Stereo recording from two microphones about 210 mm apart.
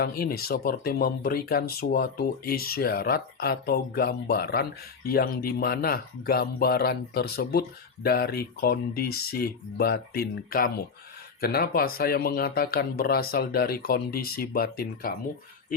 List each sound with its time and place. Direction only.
0.0 s speech: 45° left (ahead or behind)